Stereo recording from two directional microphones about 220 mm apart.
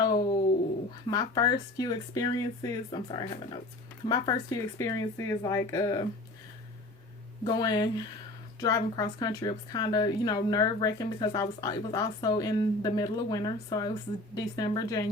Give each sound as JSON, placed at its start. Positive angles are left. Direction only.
{"t": 0.0, "sound": "a sound", "side_deg": 20}
{"t": 1.0, "sound": "a woman's voice", "side_deg": 20}
{"t": 7.4, "sound": "a woman's voice", "side_deg": 20}